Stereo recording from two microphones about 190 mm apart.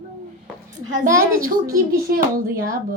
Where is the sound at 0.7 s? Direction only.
45° right (ahead or behind).